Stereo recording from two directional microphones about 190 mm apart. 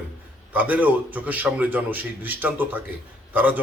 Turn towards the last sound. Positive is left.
turn(degrees=-10)  # may be behind; listen again after turning